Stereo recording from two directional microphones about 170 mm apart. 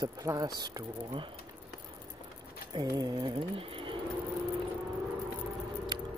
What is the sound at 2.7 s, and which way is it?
Speech, 20° right (ahead or behind).